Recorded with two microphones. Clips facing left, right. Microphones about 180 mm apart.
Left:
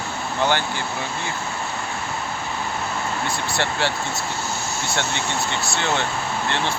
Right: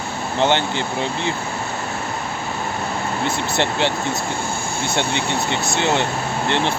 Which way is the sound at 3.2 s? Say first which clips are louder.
Right 4 dB; 20° right (ahead or behind).